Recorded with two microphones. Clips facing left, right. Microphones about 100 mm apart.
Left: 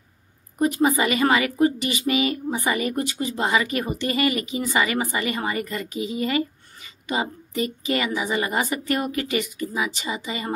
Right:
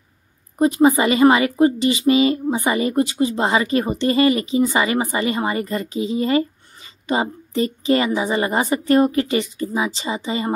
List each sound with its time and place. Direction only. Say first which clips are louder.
0.6 s a woman's voice: right 5 dB; 25° right (ahead or behind)